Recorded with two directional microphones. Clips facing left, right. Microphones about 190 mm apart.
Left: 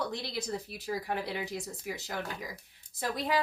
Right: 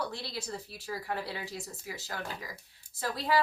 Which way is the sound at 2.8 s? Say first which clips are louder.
Left 1 dB; 10° right (ahead or behind).